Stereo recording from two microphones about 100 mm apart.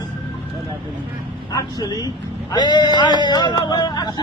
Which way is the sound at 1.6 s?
40° left (ahead or behind).